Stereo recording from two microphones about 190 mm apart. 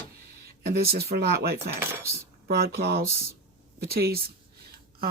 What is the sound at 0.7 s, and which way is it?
Speech, 55° right (ahead or behind).